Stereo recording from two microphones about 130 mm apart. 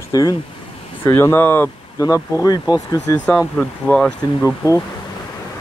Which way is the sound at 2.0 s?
25° left (ahead or behind).